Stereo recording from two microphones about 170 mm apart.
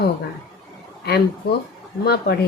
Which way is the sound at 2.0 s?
70° left (ahead or behind).